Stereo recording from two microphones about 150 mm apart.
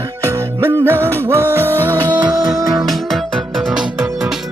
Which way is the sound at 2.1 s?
25° right (ahead or behind).